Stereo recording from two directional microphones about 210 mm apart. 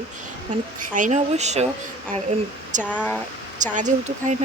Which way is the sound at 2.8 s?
5° left (ahead or behind).